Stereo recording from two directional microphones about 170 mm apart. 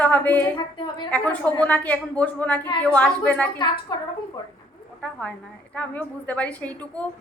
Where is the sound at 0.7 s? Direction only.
25° left (ahead or behind).